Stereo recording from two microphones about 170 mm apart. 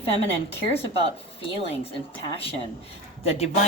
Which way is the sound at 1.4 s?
35° left (ahead or behind).